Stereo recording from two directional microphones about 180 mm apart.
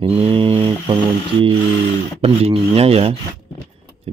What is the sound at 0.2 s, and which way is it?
Mantra, 30° right (ahead or behind).